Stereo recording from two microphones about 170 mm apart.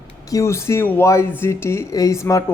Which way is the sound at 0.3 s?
15° left (ahead or behind).